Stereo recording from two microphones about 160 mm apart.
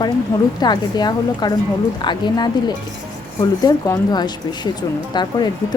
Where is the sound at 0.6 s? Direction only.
25° left (ahead or behind).